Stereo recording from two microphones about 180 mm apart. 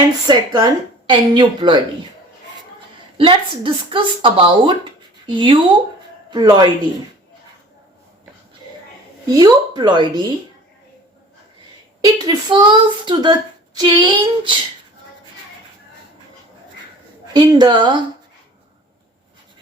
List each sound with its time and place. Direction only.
0.3 s speech: 25° right (ahead or behind)
3.2 s speech: 30° right (ahead or behind)
9.2 s speech: 20° right (ahead or behind)
12.0 s speech: 20° right (ahead or behind)
17.3 s speech: 25° right (ahead or behind)